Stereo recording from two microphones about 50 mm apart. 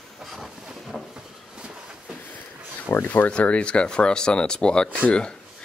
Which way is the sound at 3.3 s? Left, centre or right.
Left.